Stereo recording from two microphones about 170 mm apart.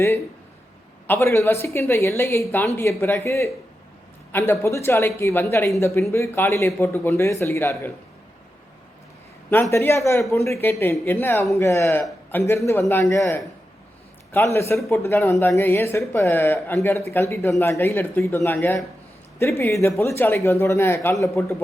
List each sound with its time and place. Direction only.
1.0 s speech: 15° left (ahead or behind)
9.5 s speech: 15° left (ahead or behind)